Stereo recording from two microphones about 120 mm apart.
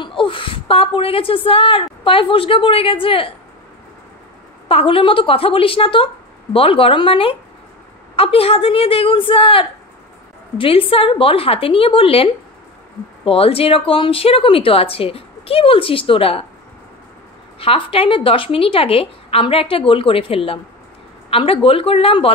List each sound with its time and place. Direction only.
0.0 s a woman's voice: 45° left (ahead or behind)
4.6 s speech: 50° left (ahead or behind)
17.6 s speech: 50° left (ahead or behind)